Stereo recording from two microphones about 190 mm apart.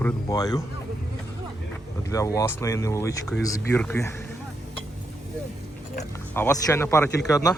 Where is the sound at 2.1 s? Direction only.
15° left (ahead or behind).